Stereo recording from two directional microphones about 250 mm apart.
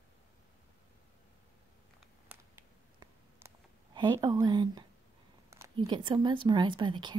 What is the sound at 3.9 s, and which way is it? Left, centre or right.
Speech, centre.